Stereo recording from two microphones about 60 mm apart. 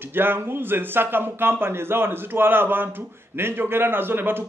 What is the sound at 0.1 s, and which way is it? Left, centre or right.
A man's voice, right.